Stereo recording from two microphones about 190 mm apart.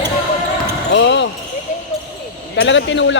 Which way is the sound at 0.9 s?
70° left (ahead or behind).